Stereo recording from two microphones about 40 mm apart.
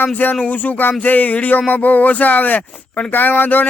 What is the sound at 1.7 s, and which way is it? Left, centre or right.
Speech, left.